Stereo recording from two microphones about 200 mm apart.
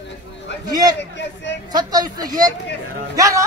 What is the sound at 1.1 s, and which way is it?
Speech, 60° left (ahead or behind).